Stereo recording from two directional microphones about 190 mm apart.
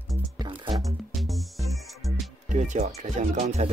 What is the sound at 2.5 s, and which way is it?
Music, 40° right (ahead or behind).